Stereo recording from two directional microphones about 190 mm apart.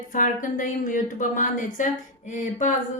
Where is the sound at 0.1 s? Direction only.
45° left (ahead or behind).